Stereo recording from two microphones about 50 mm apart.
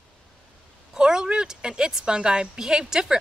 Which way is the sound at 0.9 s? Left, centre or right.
Centre.